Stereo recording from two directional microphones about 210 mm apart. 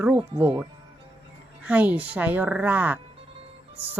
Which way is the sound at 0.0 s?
10° right (ahead or behind).